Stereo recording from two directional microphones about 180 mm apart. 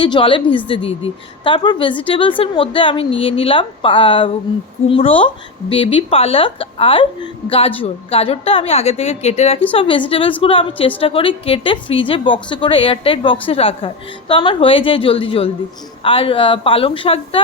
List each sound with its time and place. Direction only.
0.0 s a woman's voice: 30° left (ahead or behind)